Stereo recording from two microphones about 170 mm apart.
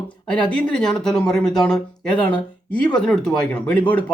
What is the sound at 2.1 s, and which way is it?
Speech, 30° left (ahead or behind).